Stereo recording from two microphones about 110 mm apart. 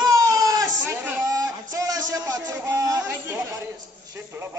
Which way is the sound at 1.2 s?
30° right (ahead or behind).